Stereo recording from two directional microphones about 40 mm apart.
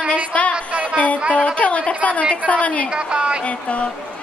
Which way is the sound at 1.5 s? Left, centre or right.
Left.